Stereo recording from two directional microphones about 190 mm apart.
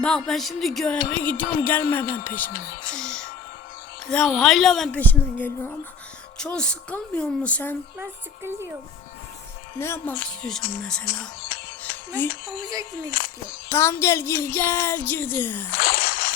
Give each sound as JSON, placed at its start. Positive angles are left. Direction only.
{"t": 0.0, "sound": "music", "side_deg": 0}
{"t": 2.1, "sound": "speech", "side_deg": 10}
{"t": 2.9, "sound": "music", "side_deg": 5}
{"t": 6.4, "sound": "speech", "side_deg": 5}
{"t": 9.7, "sound": "speech", "side_deg": 10}
{"t": 10.9, "sound": "music", "side_deg": 5}
{"t": 13.1, "sound": "speech", "side_deg": 50}
{"t": 13.7, "sound": "speech", "side_deg": 15}
{"t": 15.8, "sound": "a sound", "side_deg": 50}